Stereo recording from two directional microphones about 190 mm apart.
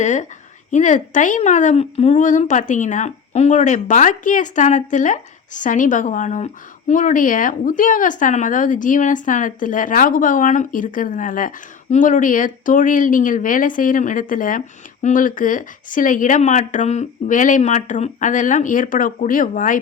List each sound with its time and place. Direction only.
0.0 s a woman's voice: 40° left (ahead or behind)